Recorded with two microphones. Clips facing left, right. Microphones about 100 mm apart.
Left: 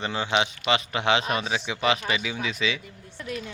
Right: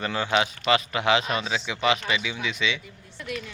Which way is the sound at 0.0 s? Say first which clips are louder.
Right 1 dB; 25° left (ahead or behind).